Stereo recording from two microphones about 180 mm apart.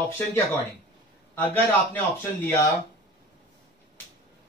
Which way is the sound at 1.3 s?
10° left (ahead or behind).